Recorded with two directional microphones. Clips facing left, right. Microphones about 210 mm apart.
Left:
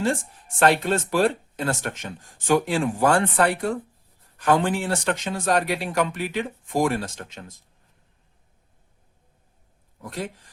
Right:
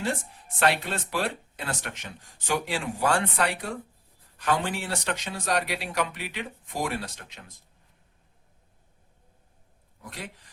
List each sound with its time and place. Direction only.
0.6 s speech: 45° left (ahead or behind)
10.0 s speech: 45° left (ahead or behind)